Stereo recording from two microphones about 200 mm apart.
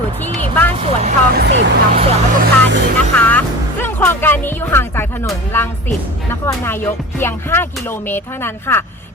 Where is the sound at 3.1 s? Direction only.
10° left (ahead or behind).